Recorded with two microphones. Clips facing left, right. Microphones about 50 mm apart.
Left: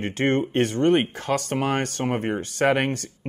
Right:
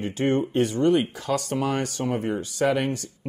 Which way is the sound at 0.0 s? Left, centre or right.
Left.